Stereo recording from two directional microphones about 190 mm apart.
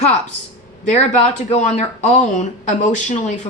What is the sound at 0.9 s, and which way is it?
Speech, 40° left (ahead or behind).